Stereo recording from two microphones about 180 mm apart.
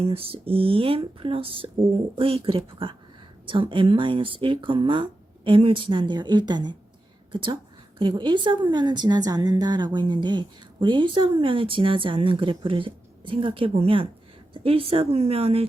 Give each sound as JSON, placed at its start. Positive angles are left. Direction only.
{"t": 0.0, "sound": "a woman's voice", "side_deg": -30}